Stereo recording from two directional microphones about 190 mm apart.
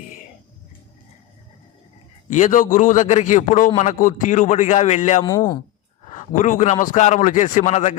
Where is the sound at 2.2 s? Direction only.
40° left (ahead or behind).